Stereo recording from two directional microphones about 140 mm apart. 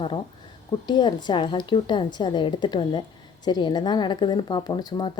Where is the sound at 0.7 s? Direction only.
30° left (ahead or behind).